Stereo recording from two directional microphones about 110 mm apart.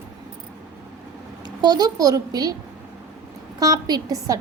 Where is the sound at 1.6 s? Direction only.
40° right (ahead or behind).